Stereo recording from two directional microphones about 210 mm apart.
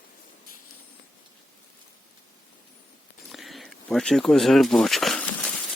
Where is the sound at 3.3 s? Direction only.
Centre (ahead or behind).